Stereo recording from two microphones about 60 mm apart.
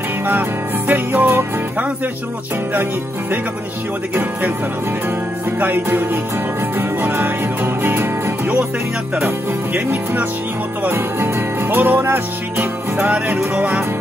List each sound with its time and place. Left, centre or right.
0.3 s music: right
2.7 s music: right
5.6 s music: right
9.8 s speech: right
10.8 s music: right
13.6 s speech: right